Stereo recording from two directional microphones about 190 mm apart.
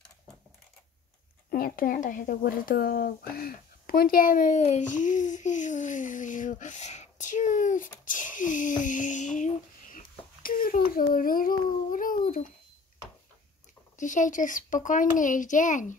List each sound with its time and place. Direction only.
1.5 s speech: 50° left (ahead or behind)
13.9 s speech: 40° left (ahead or behind)